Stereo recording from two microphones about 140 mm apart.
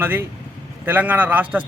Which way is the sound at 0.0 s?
15° right (ahead or behind).